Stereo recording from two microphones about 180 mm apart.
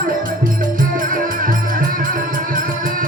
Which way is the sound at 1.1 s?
50° right (ahead or behind).